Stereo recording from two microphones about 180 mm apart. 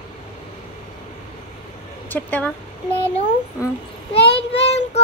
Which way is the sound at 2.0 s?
10° left (ahead or behind).